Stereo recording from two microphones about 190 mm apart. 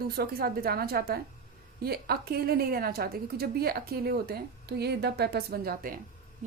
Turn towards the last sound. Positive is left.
turn(degrees=-50)  # may be behind; listen again after turning